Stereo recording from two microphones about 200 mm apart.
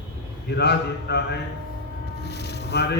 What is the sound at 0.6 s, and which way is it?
A man's voice, 55° left (ahead or behind).